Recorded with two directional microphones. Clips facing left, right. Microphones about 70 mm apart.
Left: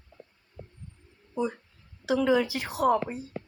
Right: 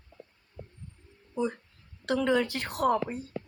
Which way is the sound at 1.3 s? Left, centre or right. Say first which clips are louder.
Left 1 dB; centre.